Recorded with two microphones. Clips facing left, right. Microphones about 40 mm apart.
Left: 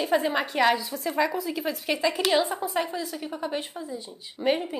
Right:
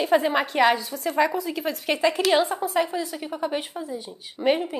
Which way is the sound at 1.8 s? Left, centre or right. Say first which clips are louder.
Right 4 dB; centre.